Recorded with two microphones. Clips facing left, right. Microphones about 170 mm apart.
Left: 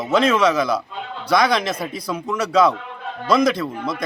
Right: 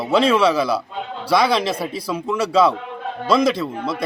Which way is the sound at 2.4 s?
30° right (ahead or behind).